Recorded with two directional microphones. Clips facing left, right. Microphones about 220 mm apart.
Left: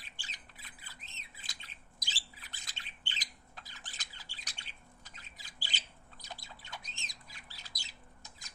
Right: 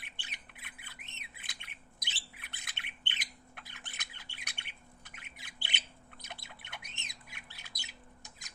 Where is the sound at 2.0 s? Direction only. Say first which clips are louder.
Even; 65° right (ahead or behind).